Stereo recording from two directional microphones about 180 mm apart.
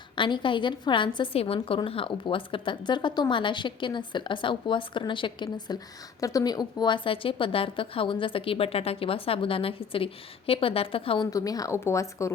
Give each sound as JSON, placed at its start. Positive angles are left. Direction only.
{"t": 0.2, "sound": "a woman's voice", "side_deg": 25}
{"t": 11.3, "sound": "speech", "side_deg": 20}